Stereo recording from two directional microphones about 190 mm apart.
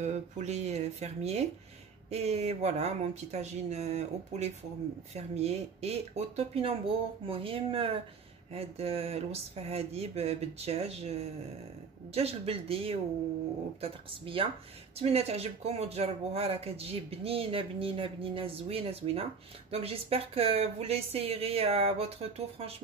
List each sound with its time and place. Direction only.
0.0 s speech: 35° right (ahead or behind)